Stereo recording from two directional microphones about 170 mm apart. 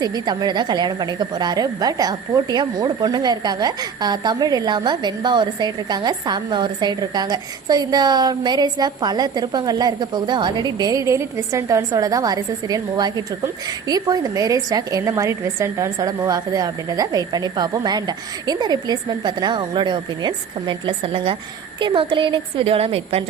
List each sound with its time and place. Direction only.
0.0 s a woman's voice: 25° right (ahead or behind)